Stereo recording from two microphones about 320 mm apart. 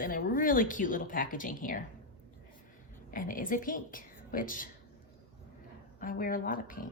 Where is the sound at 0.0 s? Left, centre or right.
Left.